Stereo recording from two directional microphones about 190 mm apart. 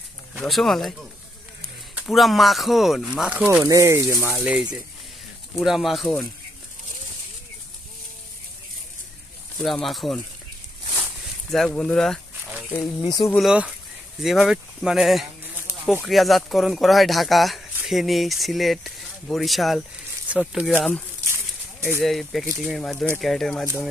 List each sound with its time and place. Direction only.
0.3 s speech: centre (ahead or behind)
2.0 s speech: centre (ahead or behind)
9.6 s speech: centre (ahead or behind)
11.5 s speech: 5° left (ahead or behind)
13.0 s speech: 20° left (ahead or behind)
13.3 s speech: centre (ahead or behind)
21.3 s a sound: 15° right (ahead or behind)
22.0 s speech: centre (ahead or behind)